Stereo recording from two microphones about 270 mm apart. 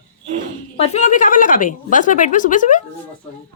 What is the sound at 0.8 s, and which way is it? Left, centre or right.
A woman's voice, left.